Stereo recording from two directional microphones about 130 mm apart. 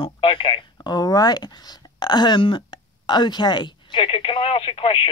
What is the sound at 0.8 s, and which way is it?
Speech, 30° left (ahead or behind).